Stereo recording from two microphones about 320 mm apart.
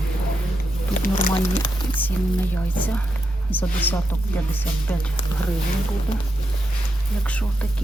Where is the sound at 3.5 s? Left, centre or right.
Centre.